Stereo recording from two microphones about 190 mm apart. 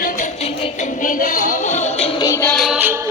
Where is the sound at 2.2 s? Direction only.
15° left (ahead or behind).